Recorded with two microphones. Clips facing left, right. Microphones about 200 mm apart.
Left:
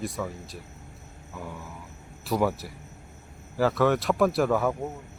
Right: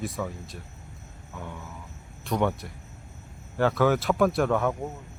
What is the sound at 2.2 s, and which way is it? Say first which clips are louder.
Speech: left 1 dB; 5° left (ahead or behind).